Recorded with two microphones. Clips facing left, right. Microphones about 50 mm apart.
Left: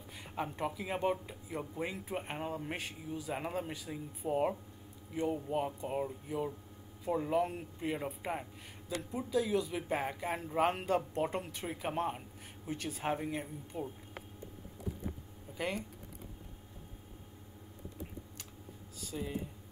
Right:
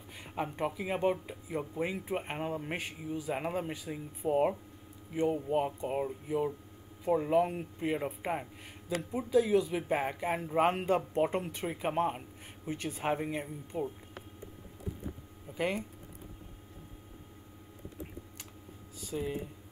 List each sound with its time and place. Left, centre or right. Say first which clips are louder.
0.1 s speech: right 2 dB; centre
4.3 s speech: right 4 dB; centre
13.7 s speech: right 5 dB; right
15.5 s speech: right 4 dB; centre
18.9 s speech: right 4 dB; centre